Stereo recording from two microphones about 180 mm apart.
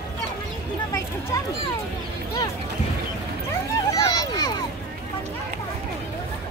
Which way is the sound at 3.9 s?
20° left (ahead or behind).